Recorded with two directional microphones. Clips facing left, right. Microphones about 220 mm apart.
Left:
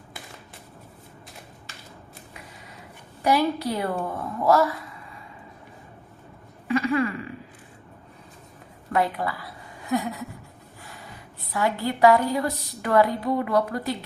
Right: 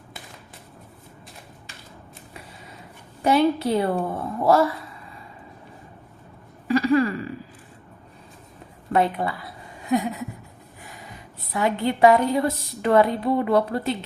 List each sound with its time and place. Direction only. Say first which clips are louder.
3.2 s a woman's voice: right 3 dB; 25° right (ahead or behind)
6.7 s a sound: right 4 dB; 35° right (ahead or behind)
8.9 s a woman's voice: right 3 dB; 25° right (ahead or behind)
9.9 s a sound: right 3 dB; 20° right (ahead or behind)
10.8 s snort: right 1 dB; 20° right (ahead or behind)
11.5 s a woman's voice: right 2 dB; 20° right (ahead or behind)